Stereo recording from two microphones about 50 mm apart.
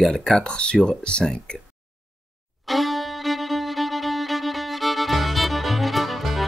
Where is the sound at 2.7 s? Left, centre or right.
Centre.